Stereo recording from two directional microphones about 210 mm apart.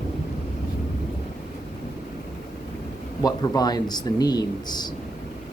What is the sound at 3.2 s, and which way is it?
Speech, 20° left (ahead or behind).